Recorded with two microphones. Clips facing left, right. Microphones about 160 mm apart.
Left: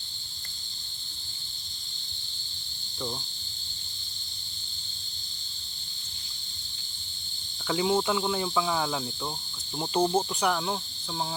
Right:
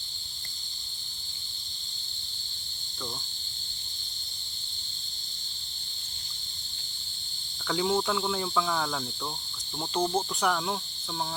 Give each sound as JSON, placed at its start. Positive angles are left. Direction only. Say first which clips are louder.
{"t": 7.7, "sound": "cricket", "louder": "left 2 dB", "side_deg": 5}